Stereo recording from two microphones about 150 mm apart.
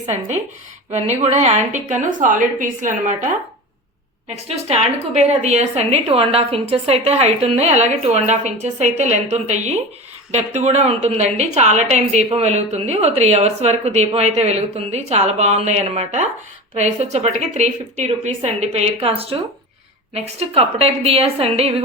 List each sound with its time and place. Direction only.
0.9 s a woman's voice: 50° right (ahead or behind)
4.4 s a woman's voice: 45° right (ahead or behind)